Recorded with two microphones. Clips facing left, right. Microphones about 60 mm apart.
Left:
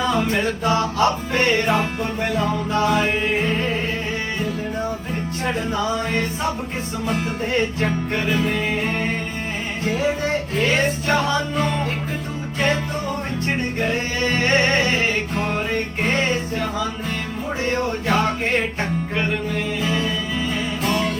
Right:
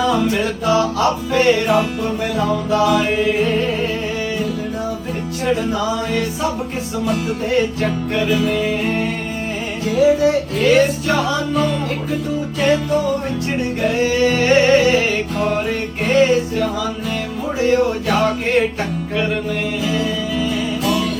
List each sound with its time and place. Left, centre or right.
0.1 s music: left
5.5 s music: left
7.6 s music: left
9.8 s music: left
13.8 s music: left
19.8 s music: left